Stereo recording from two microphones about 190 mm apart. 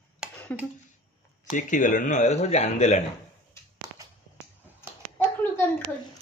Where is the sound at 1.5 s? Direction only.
40° left (ahead or behind).